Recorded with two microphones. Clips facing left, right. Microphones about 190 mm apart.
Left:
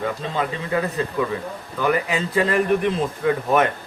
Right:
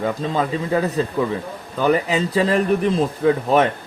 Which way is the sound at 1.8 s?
30° right (ahead or behind).